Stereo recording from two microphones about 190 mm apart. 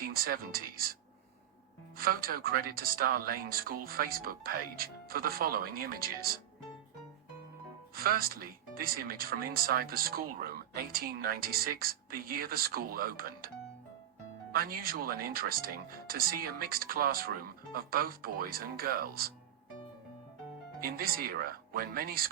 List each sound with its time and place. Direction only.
0.0 s speech: 50° right (ahead or behind)
2.0 s speech: 50° right (ahead or behind)
7.9 s speech: 50° right (ahead or behind)
14.5 s speech: 50° right (ahead or behind)
20.8 s speech: 50° right (ahead or behind)